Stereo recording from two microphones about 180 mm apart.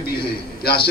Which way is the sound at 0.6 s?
60° left (ahead or behind).